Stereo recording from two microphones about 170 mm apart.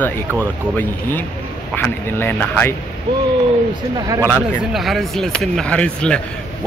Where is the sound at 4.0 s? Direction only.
20° right (ahead or behind).